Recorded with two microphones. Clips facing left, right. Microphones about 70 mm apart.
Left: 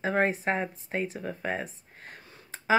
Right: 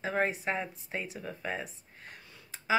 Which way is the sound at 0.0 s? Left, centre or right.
Left.